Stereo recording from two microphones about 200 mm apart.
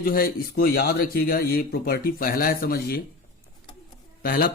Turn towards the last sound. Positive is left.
turn(degrees=50)  # may be behind; listen again after turning